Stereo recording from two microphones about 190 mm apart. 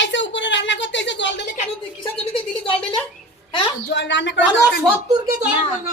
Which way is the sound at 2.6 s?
25° left (ahead or behind).